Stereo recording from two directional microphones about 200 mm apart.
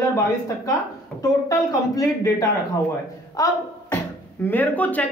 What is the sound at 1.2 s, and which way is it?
A woman's voice, 15° left (ahead or behind).